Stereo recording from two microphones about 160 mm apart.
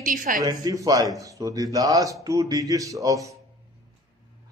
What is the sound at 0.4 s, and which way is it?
A man's voice, 20° right (ahead or behind).